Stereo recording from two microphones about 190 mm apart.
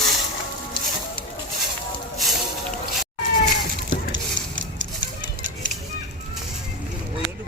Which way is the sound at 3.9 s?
85° right.